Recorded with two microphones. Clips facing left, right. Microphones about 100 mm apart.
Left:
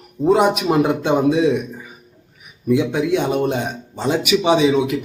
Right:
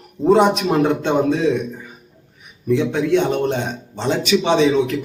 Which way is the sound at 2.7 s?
10° left (ahead or behind).